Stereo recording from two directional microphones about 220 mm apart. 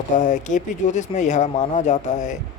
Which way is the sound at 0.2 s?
35° left (ahead or behind).